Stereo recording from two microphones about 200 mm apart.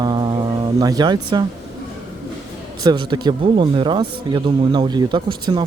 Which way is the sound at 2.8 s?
25° right (ahead or behind).